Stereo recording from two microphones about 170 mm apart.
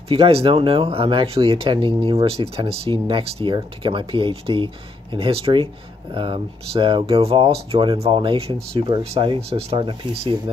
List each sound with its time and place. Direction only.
0.1 s speech: 35° right (ahead or behind)